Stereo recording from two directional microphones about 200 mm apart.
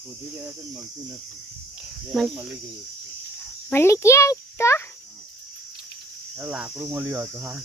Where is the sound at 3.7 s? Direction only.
15° left (ahead or behind).